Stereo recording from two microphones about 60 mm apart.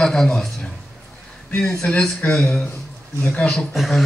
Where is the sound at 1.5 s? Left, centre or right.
Centre.